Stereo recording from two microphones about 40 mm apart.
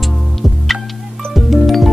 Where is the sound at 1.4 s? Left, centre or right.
Centre.